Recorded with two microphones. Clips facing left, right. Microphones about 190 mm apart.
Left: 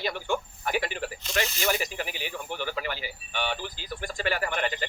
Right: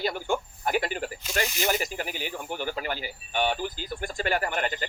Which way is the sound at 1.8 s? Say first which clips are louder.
Right 1 dB; 45° right (ahead or behind).